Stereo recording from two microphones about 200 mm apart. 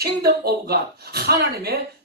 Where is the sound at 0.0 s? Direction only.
50° right (ahead or behind).